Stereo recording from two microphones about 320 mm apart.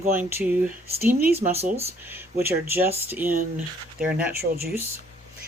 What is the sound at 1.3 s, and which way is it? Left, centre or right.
Speech, right.